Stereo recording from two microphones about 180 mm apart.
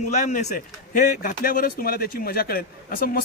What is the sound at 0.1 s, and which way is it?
A man's voice, 40° left (ahead or behind).